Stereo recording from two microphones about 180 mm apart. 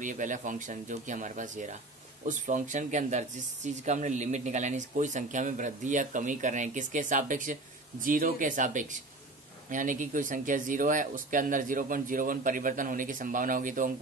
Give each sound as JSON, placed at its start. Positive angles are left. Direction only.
{"t": 0.0, "sound": "speech", "side_deg": -45}